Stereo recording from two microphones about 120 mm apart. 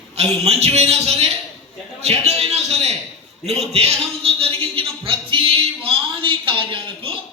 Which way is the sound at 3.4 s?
60° right (ahead or behind).